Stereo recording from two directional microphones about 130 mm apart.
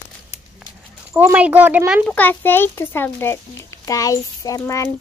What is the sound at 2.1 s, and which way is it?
A child's voice, 15° left (ahead or behind).